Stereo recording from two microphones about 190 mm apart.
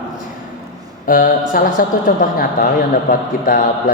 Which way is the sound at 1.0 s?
50° left (ahead or behind).